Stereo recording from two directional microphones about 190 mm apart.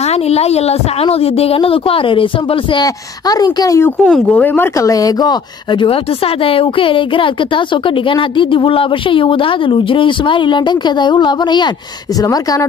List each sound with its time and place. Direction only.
0.0 s speech: 35° left (ahead or behind); by 3.9 s 15° left (ahead or behind)
4.0 s speech: 5° left (ahead or behind); by 12.6 s 20° left (ahead or behind)